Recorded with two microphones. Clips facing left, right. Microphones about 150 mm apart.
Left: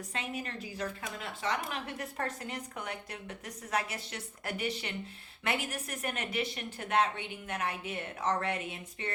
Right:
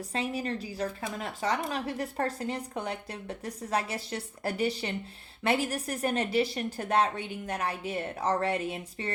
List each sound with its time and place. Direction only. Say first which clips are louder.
0.1 s a woman's voice: right 8 dB; 35° right (ahead or behind)